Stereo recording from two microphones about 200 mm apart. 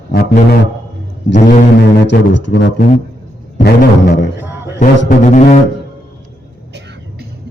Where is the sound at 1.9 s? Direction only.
60° left (ahead or behind).